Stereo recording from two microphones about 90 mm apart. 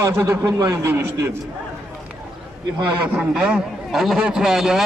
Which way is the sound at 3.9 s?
Centre (ahead or behind).